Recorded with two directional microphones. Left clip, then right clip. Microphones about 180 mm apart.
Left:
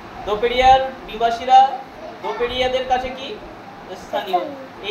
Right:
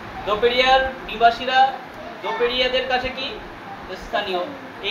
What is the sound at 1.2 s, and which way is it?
A man's voice, 20° left (ahead or behind).